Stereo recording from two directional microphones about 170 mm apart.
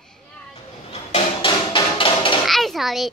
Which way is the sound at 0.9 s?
35° left (ahead or behind).